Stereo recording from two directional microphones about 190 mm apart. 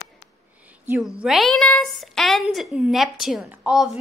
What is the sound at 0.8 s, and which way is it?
A woman's voice, 5° right (ahead or behind).